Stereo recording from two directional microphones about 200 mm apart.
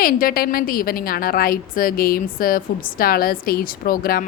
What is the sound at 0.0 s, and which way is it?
A woman's voice, 45° left (ahead or behind).